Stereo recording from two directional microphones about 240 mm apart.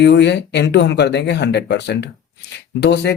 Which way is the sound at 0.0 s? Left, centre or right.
Left.